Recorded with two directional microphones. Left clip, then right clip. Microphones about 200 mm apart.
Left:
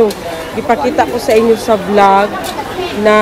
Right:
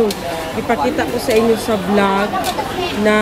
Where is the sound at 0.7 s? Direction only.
Centre (ahead or behind).